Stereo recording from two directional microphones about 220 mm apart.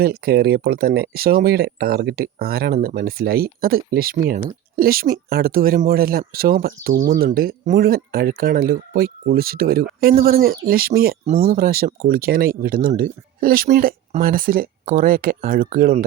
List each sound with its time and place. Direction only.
0.0 s speech: 45° right (ahead or behind)